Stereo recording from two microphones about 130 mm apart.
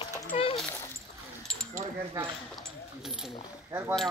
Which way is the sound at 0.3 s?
65° left (ahead or behind).